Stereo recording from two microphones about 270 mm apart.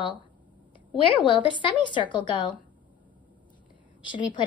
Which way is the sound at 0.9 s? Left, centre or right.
Centre.